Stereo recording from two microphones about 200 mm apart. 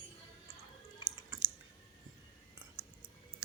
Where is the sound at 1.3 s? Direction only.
15° right (ahead or behind).